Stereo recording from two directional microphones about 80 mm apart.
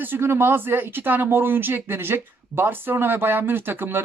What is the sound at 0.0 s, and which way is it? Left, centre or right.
Speech, right.